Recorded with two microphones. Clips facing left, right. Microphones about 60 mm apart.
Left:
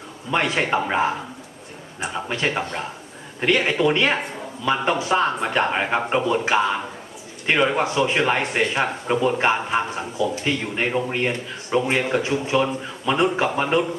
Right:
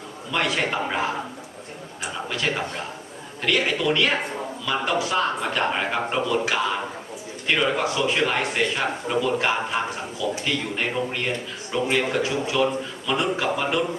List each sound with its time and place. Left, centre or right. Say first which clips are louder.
0.3 s speech: left 3 dB; left